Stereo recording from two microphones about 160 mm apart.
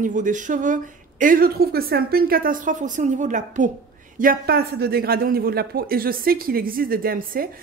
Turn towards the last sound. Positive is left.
turn(degrees=-65)  # may be behind; listen again after turning